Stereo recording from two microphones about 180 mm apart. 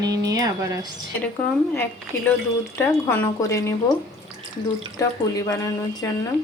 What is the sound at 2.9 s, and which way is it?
Speech, 15° left (ahead or behind).